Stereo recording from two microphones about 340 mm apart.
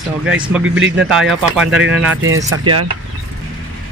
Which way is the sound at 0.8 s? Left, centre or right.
Right.